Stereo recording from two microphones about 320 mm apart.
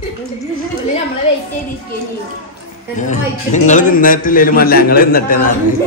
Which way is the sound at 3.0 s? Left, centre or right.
Left.